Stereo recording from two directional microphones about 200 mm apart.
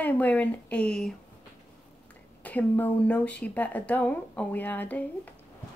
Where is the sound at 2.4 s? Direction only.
10° left (ahead or behind).